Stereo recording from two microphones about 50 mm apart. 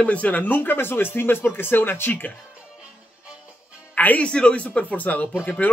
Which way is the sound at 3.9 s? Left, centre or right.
Left.